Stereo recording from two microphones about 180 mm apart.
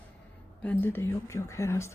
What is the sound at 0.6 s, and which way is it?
Speech, 10° left (ahead or behind).